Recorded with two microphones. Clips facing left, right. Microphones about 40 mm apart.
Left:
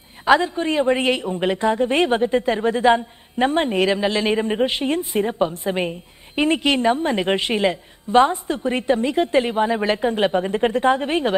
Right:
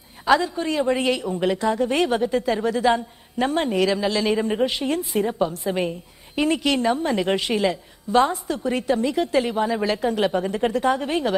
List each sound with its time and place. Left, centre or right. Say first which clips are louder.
0.3 s a woman's voice: left 3 dB; left